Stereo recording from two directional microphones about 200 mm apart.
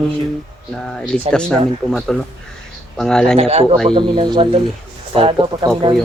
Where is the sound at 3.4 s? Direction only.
30° right (ahead or behind).